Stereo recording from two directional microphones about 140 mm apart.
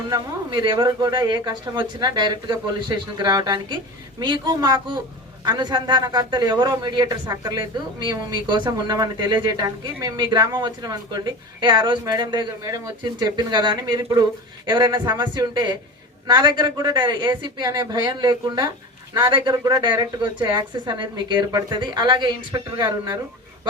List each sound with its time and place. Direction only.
0.1 s speech: 35° right (ahead or behind)